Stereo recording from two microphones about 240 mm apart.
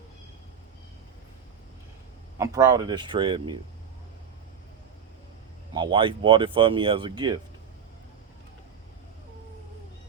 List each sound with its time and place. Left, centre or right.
2.4 s speech: centre
5.7 s speech: centre